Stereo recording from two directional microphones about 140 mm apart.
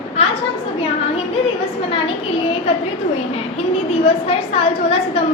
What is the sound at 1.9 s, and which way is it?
Speech, 40° left (ahead or behind).